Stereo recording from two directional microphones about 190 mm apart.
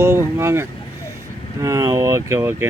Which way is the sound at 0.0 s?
15° right (ahead or behind).